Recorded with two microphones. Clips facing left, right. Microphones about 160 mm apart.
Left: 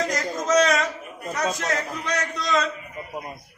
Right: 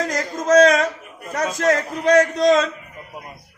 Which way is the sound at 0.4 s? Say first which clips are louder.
Right 7 dB; 55° right (ahead or behind).